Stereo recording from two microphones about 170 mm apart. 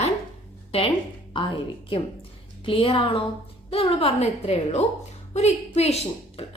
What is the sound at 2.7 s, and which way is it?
A woman's voice, 30° left (ahead or behind).